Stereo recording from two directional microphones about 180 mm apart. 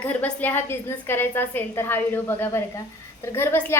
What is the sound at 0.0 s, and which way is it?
A woman's voice, 10° left (ahead or behind).